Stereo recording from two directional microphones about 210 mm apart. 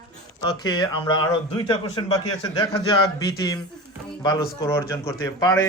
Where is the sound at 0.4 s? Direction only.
20° left (ahead or behind).